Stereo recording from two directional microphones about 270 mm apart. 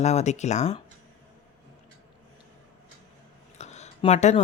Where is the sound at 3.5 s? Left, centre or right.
Left.